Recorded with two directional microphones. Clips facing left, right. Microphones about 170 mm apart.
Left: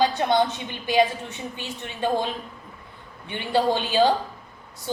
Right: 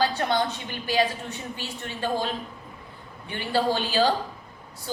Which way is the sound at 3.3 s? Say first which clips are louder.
Left 2 dB; 20° left (ahead or behind).